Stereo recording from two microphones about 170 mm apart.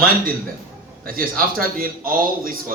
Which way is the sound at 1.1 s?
55° right (ahead or behind).